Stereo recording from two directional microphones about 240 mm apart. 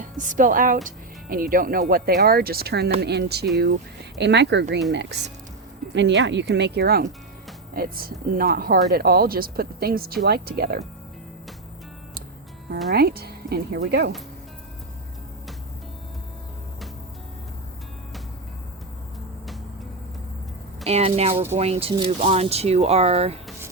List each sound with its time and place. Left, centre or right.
0.0 s speech: right
12.9 s speech: right
20.8 s speech: right